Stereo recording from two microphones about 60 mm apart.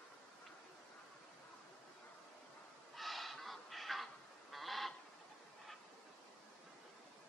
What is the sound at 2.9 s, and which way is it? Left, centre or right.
Goose, centre.